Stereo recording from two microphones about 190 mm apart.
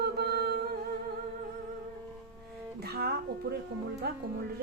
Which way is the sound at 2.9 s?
55° right (ahead or behind).